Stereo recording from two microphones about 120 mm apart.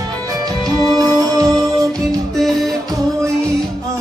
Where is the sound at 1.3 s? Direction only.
30° right (ahead or behind).